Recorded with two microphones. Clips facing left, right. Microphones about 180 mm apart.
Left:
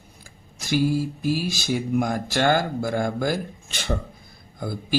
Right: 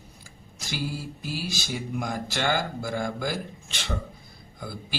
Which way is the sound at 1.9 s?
55° left (ahead or behind).